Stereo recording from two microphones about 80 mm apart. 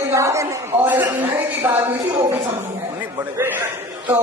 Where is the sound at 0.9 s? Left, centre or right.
Right.